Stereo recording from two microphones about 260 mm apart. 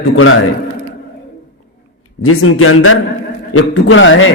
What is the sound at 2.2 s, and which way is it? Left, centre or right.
A man's voice, left.